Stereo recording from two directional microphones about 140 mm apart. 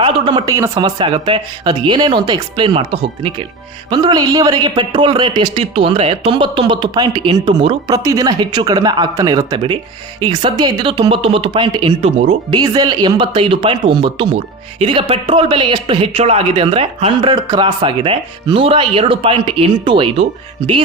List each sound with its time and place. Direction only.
0.0 s a sound: 40° right (ahead or behind)
0.4 s speech: 20° right (ahead or behind)
0.8 s speech: 35° right (ahead or behind)
17.3 s speech: 30° right (ahead or behind)